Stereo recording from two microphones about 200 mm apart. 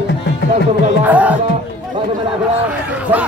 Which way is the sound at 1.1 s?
5° right (ahead or behind).